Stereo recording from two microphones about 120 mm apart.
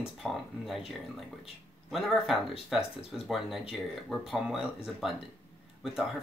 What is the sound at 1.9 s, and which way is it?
Speech, centre (ahead or behind).